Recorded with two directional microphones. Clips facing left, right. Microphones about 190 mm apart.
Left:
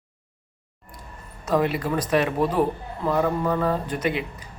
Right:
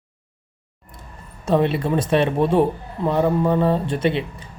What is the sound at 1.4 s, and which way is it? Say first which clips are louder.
A man's voice: right 4 dB; 25° right (ahead or behind).